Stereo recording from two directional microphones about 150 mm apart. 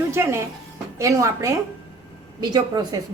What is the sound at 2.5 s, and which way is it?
Speech, 25° right (ahead or behind).